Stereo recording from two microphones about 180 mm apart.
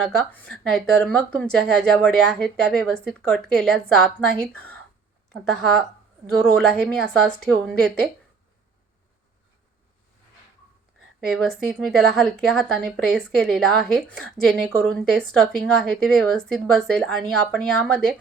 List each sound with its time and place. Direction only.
0.2 s a woman's voice: 5° left (ahead or behind)
5.3 s a woman's voice: 5° left (ahead or behind)
11.3 s a woman's voice: centre (ahead or behind)